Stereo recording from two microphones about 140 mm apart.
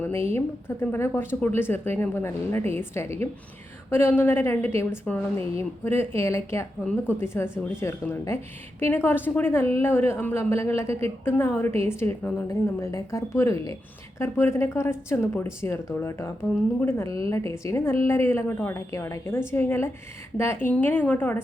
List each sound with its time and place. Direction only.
0.0 s a woman's voice: 15° left (ahead or behind)